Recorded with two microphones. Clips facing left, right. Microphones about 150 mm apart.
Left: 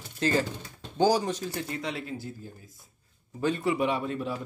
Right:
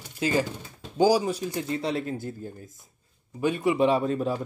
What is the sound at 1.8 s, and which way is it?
Speech, 35° right (ahead or behind).